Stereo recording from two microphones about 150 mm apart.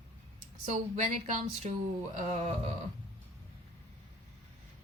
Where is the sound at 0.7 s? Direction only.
50° right (ahead or behind).